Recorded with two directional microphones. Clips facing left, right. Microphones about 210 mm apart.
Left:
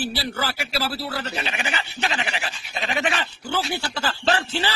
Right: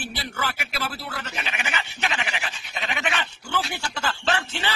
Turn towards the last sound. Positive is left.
turn(degrees=35)  # may be behind; listen again after turning